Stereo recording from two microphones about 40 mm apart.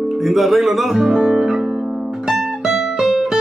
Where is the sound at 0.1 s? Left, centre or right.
Centre.